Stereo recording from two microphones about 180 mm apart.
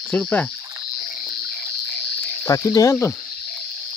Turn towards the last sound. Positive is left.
turn(degrees=15)  # may be behind; listen again after turning